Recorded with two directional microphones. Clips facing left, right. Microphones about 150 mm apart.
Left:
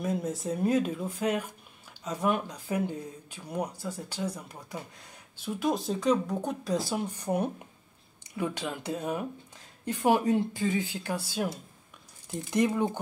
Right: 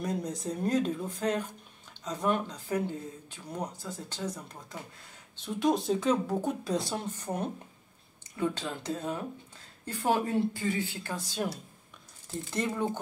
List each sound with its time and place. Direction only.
0.0 s speech: 5° left (ahead or behind)